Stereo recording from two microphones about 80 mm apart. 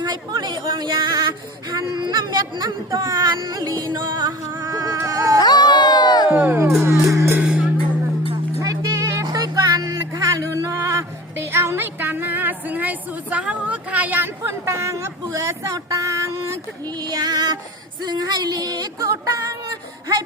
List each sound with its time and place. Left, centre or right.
0.0 s a sound: right
3.2 s music: right
4.6 s music: right
4.9 s a sound: right
5.4 s music: left
6.3 s music: right
6.8 s music: right
7.4 s music: centre
8.6 s music: right
11.3 s music: right
16.8 s female singing: right
18.0 s a sound: right